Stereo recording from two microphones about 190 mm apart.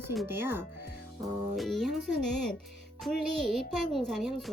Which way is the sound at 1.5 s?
Centre (ahead or behind).